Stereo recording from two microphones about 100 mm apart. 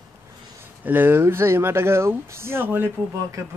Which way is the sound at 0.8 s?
20° right (ahead or behind).